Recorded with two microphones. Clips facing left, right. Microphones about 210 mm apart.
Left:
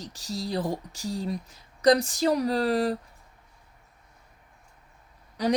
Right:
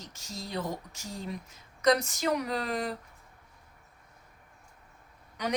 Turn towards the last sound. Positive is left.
turn(degrees=35)  # may be behind; listen again after turning